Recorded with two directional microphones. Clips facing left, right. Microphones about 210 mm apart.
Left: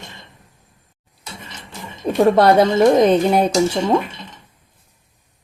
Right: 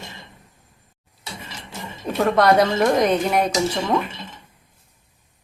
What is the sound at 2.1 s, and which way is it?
Speech, 30° left (ahead or behind).